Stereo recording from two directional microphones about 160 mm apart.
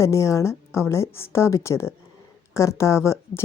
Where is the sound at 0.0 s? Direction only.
20° left (ahead or behind).